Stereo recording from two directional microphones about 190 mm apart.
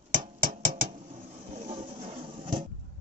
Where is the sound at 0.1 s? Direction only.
45° right (ahead or behind); by 2.7 s 25° right (ahead or behind).